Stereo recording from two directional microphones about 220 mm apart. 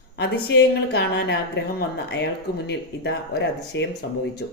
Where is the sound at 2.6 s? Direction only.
50° left (ahead or behind).